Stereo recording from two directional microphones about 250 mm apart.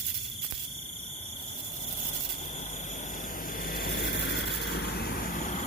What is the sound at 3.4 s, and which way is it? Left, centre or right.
Vehicle, left.